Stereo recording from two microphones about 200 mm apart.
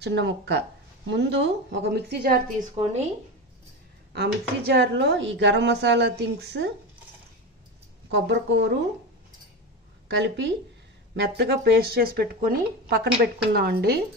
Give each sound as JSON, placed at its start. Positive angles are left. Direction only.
{"t": 0.0, "sound": "speech", "side_deg": -60}
{"t": 2.7, "sound": "speech", "side_deg": -30}
{"t": 4.1, "sound": "speech", "side_deg": -60}
{"t": 8.1, "sound": "speech", "side_deg": -60}
{"t": 10.0, "sound": "speech", "side_deg": -60}